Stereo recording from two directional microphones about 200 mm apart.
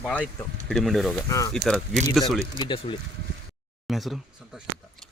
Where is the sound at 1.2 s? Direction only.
15° left (ahead or behind).